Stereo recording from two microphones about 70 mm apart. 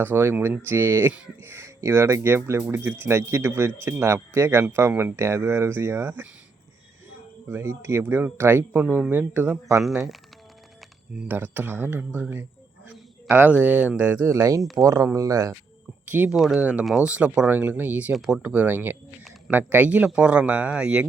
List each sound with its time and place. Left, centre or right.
0.0 s speech: right
7.4 s speech: right
11.3 s speech: right
14.3 s speech: right
14.6 s speech: centre
15.1 s speech: right
16.0 s speech: right
16.3 s speech: centre
16.6 s speech: centre
18.1 s speech: centre
18.4 s speech: right